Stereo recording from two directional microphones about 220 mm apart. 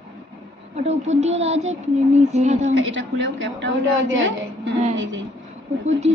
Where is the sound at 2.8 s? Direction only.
55° right (ahead or behind).